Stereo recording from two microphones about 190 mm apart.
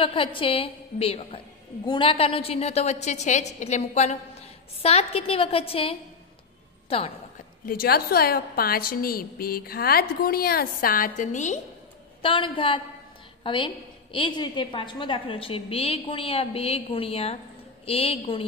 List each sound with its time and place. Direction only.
0.0 s a woman's voice: 25° left (ahead or behind)
7.6 s a woman's voice: 50° left (ahead or behind)
12.2 s a woman's voice: 30° left (ahead or behind)